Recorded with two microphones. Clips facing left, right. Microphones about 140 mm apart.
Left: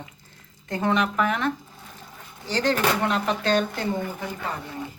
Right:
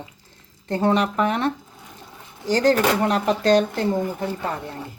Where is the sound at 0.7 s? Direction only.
35° right (ahead or behind).